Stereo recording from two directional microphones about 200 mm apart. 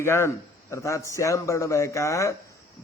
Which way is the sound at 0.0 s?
15° left (ahead or behind).